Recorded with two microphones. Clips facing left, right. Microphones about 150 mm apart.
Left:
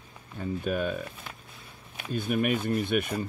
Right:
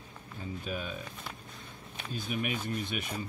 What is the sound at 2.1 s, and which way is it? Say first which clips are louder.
Speech: left 8 dB; 55° left (ahead or behind).